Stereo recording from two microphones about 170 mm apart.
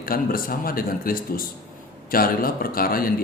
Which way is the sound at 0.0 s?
60° left (ahead or behind).